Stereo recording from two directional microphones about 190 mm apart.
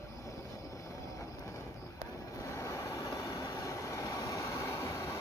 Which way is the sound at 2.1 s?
15° left (ahead or behind).